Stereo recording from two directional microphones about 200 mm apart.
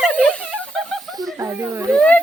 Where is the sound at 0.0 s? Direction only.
5° left (ahead or behind).